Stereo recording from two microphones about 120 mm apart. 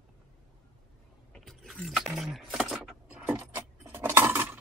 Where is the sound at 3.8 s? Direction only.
20° right (ahead or behind).